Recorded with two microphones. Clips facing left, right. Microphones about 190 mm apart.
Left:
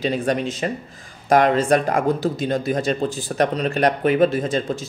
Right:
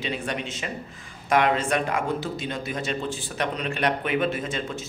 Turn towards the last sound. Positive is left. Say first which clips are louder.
# left 7 dB
turn(degrees=35)  # may be behind; listen again after turning